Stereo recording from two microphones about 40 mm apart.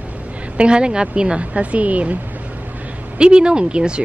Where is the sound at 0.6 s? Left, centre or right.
Right.